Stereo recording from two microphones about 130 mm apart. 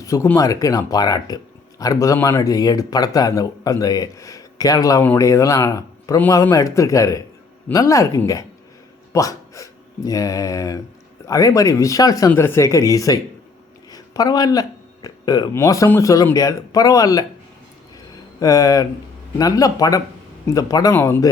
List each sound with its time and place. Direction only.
0.0 s speech: 25° left (ahead or behind)
18.3 s speech: 25° left (ahead or behind)